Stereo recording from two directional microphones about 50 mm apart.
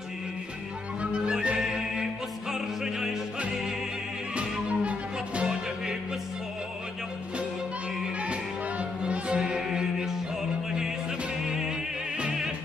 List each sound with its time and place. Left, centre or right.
1.6 s music: centre
4.4 s music: right
8.2 s music: right
9.4 s music: centre